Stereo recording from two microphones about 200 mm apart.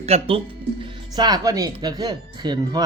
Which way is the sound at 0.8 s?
20° right (ahead or behind).